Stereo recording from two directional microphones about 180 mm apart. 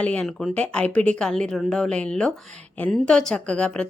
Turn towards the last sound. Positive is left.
turn(degrees=5)  # may be behind; listen again after turning